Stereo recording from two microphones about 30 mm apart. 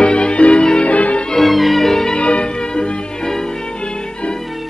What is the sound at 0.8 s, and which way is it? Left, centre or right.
Music, left.